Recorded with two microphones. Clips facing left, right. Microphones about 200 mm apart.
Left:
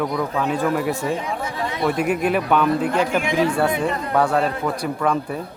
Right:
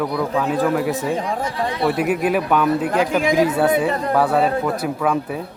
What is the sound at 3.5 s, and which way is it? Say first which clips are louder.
Speech: right 3 dB; 5° right (ahead or behind).